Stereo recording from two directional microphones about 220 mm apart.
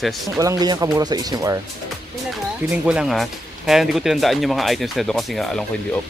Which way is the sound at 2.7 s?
5° right (ahead or behind).